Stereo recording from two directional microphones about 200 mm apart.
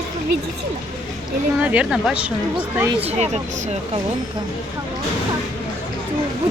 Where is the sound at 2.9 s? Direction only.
30° right (ahead or behind).